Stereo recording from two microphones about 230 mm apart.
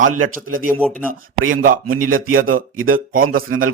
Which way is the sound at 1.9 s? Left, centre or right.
Right.